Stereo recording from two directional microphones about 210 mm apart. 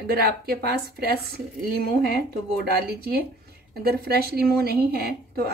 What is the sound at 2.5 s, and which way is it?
Speech, 45° right (ahead or behind).